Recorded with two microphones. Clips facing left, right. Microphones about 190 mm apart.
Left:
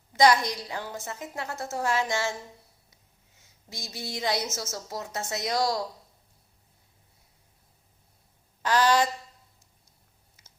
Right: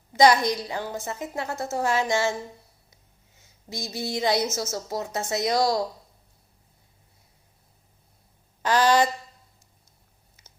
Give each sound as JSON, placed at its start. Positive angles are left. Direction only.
{"t": 0.2, "sound": "a woman's voice", "side_deg": -20}
{"t": 3.7, "sound": "a woman's voice", "side_deg": -25}
{"t": 8.6, "sound": "a woman's voice", "side_deg": -20}